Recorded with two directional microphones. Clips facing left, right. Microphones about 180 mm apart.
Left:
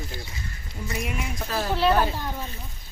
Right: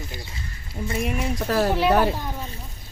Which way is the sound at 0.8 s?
30° right (ahead or behind).